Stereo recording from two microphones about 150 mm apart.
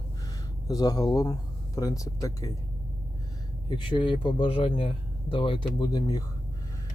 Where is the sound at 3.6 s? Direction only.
30° left (ahead or behind).